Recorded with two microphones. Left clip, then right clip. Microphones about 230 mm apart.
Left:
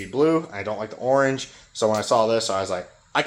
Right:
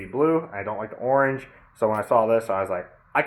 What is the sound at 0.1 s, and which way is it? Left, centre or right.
Speech, left.